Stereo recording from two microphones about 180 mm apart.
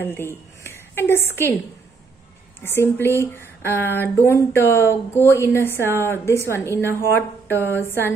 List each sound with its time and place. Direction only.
0.0 s a woman's voice: 10° left (ahead or behind)
2.6 s speech: 15° left (ahead or behind)